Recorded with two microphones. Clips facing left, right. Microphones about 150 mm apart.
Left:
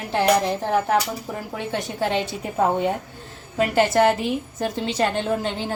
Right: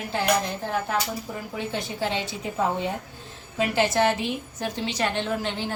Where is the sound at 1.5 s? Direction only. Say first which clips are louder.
Left 2 dB; 60° left (ahead or behind); by 5.5 s 45° left (ahead or behind).